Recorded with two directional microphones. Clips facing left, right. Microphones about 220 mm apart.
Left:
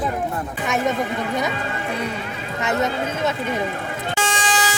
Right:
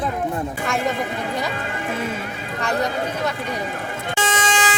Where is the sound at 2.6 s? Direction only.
20° left (ahead or behind).